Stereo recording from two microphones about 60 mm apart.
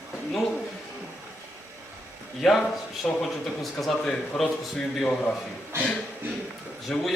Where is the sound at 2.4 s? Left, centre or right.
Centre.